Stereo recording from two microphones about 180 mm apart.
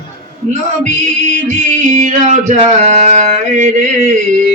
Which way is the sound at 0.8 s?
40° right (ahead or behind).